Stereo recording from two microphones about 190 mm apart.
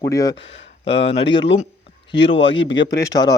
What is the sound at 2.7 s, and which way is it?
Speech, 20° left (ahead or behind).